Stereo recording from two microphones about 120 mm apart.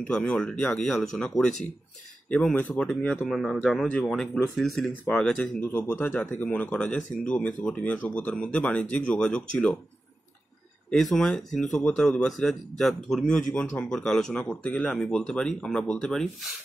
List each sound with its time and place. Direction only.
0.0 s speech: 10° left (ahead or behind)
3.3 s speech: centre (ahead or behind)
5.6 s speech: 15° left (ahead or behind)
10.9 s speech: 5° left (ahead or behind)